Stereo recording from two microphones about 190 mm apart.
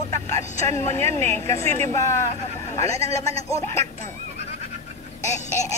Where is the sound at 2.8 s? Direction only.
35° right (ahead or behind).